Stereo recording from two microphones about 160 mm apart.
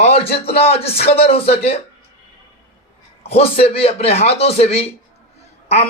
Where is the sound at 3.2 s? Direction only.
40° left (ahead or behind).